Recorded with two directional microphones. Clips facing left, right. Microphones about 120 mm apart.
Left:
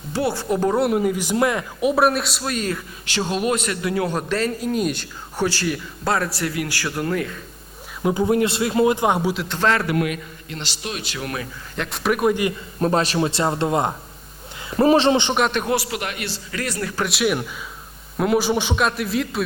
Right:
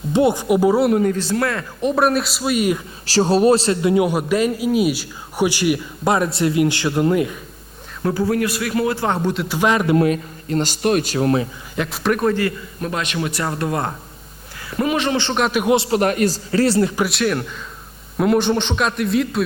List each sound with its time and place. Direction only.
0.1 s speech: 20° right (ahead or behind); by 1.9 s 15° left (ahead or behind)
1.9 s speech: centre (ahead or behind)
3.1 s a man's voice: 35° right (ahead or behind); by 7.3 s 20° right (ahead or behind)
8.0 s speech: 20° left (ahead or behind)
9.3 s speech: centre (ahead or behind)
9.6 s a man's voice: 15° right (ahead or behind); by 11.4 s 30° right (ahead or behind)
11.8 s speech: centre (ahead or behind); by 12.5 s 15° left (ahead or behind)
12.8 s speech: 35° left (ahead or behind)
15.4 s speech: centre (ahead or behind)
15.6 s a man's voice: 20° right (ahead or behind)
15.9 s a man's voice: 40° right (ahead or behind)
17.1 s speech: 5° left (ahead or behind)